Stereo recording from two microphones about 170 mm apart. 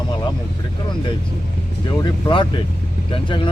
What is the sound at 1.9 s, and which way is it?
Speech, 25° left (ahead or behind).